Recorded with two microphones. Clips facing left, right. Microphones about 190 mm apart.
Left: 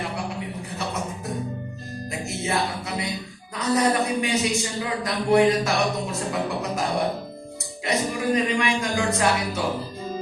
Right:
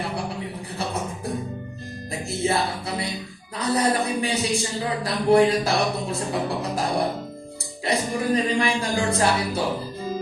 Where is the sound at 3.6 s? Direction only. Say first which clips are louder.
Left 1 dB; 35° right (ahead or behind).